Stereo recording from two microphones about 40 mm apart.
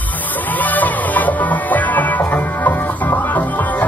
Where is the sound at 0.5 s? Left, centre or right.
Left.